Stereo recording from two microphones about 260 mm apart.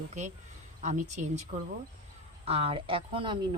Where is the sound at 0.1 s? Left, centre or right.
Right.